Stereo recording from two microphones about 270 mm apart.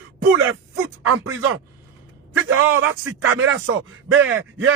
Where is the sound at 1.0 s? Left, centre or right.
Right.